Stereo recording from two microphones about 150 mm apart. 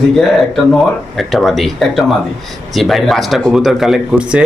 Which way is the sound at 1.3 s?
Centre (ahead or behind).